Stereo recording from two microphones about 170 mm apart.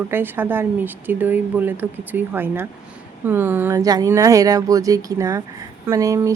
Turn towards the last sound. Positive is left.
turn(degrees=-20)  # may be behind; listen again after turning